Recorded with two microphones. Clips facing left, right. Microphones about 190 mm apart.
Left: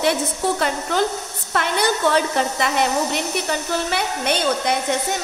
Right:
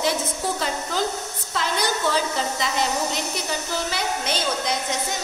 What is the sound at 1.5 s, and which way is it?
A woman's voice, 60° left (ahead or behind).